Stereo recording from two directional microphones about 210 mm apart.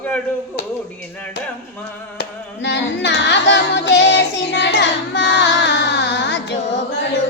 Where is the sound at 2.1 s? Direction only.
60° left (ahead or behind).